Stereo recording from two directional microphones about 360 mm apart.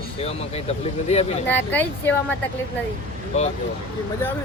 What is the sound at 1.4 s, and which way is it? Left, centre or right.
Speech, centre.